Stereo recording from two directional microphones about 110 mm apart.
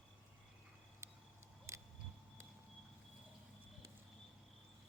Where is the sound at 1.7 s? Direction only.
25° right (ahead or behind).